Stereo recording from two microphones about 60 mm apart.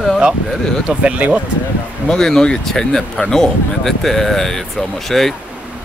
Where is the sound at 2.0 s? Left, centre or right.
Centre.